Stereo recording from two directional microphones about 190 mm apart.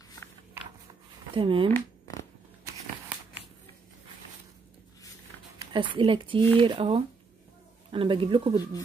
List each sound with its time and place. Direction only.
1.3 s speech: 25° right (ahead or behind)
1.7 s zipper: 15° left (ahead or behind)
5.6 s speech: 25° right (ahead or behind)